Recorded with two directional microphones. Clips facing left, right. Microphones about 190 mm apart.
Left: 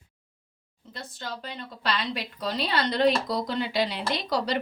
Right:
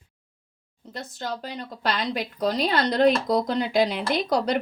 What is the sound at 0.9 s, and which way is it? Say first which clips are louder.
A woman's voice: right 5 dB; 45° right (ahead or behind).